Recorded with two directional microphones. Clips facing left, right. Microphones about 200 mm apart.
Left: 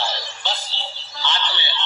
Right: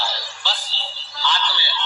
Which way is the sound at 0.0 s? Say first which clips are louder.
Left 2 dB; 20° left (ahead or behind).